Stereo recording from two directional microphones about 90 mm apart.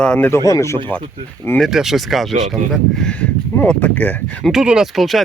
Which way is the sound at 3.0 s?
15° left (ahead or behind).